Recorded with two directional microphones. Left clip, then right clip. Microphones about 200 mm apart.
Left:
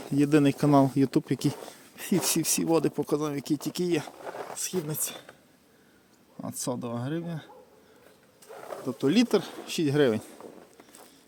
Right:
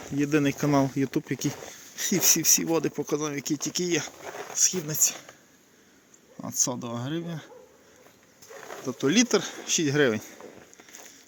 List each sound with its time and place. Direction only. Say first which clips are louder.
0.2 s speech: left 2 dB; 25° left (ahead or behind)
4.2 s a sound: even; 5° right (ahead or behind)
4.5 s speech: right 9 dB; 5° left (ahead or behind)
6.6 s speech: right 4 dB; 5° left (ahead or behind)
8.9 s speech: right 1 dB; 5° left (ahead or behind)